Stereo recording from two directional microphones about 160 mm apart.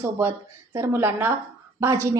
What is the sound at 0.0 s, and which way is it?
A woman's voice, 15° right (ahead or behind).